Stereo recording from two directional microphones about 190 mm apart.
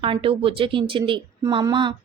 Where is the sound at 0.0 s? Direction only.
30° right (ahead or behind).